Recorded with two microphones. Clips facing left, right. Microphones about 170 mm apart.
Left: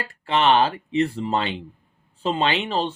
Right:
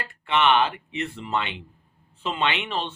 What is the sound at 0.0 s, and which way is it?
Speech, 35° left (ahead or behind).